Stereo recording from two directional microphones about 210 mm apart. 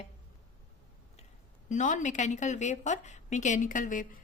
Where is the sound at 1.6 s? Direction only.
35° left (ahead or behind).